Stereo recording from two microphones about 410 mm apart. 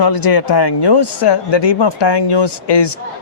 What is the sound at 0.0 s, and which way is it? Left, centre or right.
A man's voice, left.